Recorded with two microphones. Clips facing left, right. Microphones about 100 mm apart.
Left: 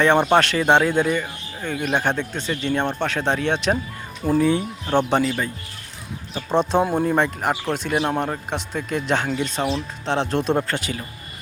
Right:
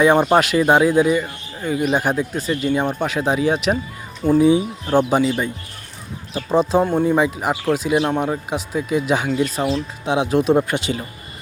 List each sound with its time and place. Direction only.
0.0 s speech: 10° right (ahead or behind)
6.3 s speech: 5° right (ahead or behind)
10.8 s speech: 20° right (ahead or behind)